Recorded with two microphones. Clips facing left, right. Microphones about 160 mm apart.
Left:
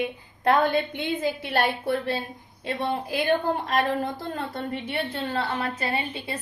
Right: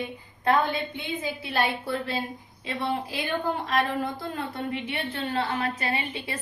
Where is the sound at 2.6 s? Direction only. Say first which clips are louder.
Left 2 dB; 50° left (ahead or behind); by 6.3 s 35° left (ahead or behind).